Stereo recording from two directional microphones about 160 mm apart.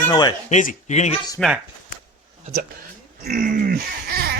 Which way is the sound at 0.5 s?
50° left (ahead or behind).